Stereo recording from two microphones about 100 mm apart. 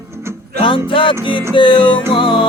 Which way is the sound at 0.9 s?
60° left (ahead or behind).